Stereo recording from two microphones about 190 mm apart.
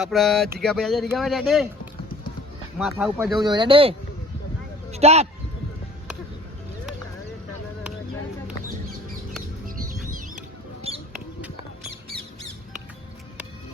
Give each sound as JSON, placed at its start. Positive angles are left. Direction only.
{"t": 0.0, "sound": "speech", "side_deg": 0}
{"t": 3.4, "sound": "speech", "side_deg": -25}
{"t": 10.9, "sound": "a sound", "side_deg": -30}